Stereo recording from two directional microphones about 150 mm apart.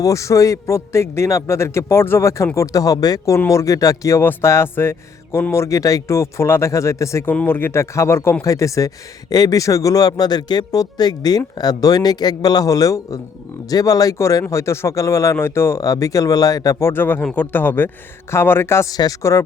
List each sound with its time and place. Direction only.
0.0 s speech: 20° left (ahead or behind)